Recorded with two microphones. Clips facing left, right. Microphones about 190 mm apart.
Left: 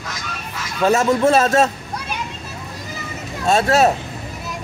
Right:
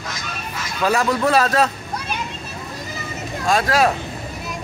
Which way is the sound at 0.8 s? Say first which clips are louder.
Left 4 dB; 25° left (ahead or behind).